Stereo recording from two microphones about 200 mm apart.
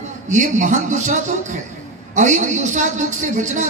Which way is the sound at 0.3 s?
40° right (ahead or behind).